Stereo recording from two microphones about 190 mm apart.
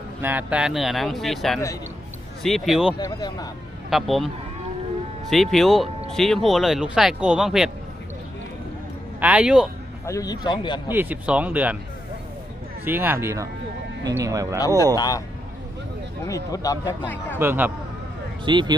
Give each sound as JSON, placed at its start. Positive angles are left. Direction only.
{"t": 0.2, "sound": "speech", "side_deg": -10}
{"t": 3.0, "sound": "speech", "side_deg": 20}
{"t": 3.8, "sound": "speech", "side_deg": 0}
{"t": 5.3, "sound": "speech", "side_deg": 0}
{"t": 9.2, "sound": "speech", "side_deg": -5}
{"t": 10.1, "sound": "speech", "side_deg": 20}
{"t": 10.8, "sound": "speech", "side_deg": -10}
{"t": 12.8, "sound": "speech", "side_deg": -10}
{"t": 14.9, "sound": "speech", "side_deg": 20}
{"t": 16.2, "sound": "speech", "side_deg": 20}
{"t": 17.3, "sound": "speech", "side_deg": -10}
{"t": 18.4, "sound": "speech", "side_deg": -25}